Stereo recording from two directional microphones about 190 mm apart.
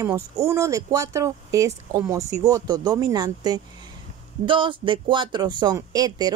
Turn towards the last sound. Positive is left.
turn(degrees=-20)  # may be behind; listen again after turning